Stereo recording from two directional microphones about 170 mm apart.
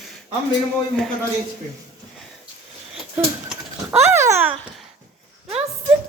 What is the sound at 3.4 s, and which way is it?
Speech, 15° right (ahead or behind).